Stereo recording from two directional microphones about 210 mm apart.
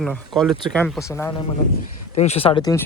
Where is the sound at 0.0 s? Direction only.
Centre (ahead or behind).